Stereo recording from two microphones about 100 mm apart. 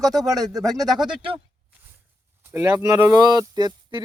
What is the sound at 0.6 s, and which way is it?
Speech, 35° right (ahead or behind).